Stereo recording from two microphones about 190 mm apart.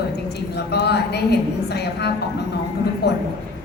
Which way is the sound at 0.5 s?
60° left (ahead or behind).